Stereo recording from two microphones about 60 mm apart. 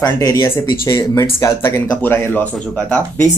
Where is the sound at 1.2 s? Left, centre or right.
Left.